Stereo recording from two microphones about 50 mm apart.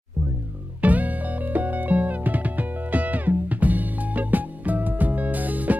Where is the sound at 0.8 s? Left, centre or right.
Right.